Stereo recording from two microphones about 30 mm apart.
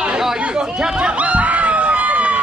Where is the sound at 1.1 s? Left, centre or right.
Right.